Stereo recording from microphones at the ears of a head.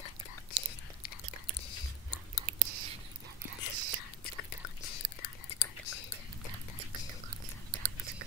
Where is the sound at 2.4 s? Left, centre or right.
Right.